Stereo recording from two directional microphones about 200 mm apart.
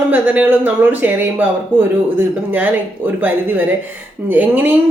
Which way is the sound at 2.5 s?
10° right (ahead or behind).